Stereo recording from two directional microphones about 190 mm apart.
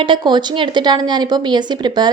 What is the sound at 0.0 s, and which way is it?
A woman's voice, 25° right (ahead or behind).